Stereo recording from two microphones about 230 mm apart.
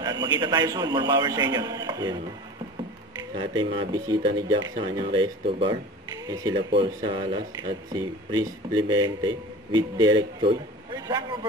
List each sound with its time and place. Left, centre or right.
0.0 s a man's voice: centre
3.2 s speech: centre